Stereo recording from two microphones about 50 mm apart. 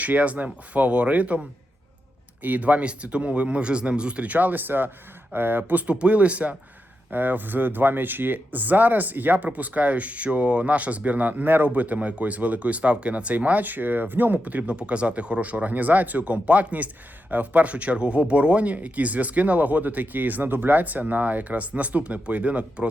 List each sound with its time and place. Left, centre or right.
0.0 s speech: right
5.8 s speech: right
7.1 s speech: right